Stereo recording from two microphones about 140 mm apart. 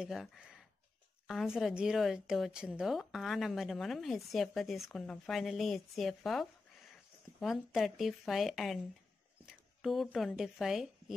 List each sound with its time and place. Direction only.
0.0 s a woman's voice: centre (ahead or behind)